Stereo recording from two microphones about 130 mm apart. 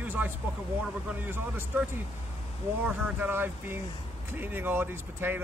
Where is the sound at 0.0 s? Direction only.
15° right (ahead or behind).